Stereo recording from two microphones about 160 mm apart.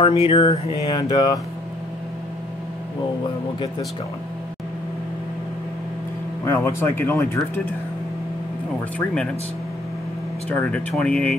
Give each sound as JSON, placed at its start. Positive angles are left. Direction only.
{"t": 0.0, "sound": "mantra", "side_deg": 35}
{"t": 6.4, "sound": "speech", "side_deg": 15}
{"t": 8.9, "sound": "speech", "side_deg": 5}
{"t": 10.5, "sound": "speech", "side_deg": 5}